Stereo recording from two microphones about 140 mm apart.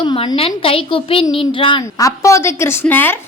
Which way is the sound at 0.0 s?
35° left (ahead or behind).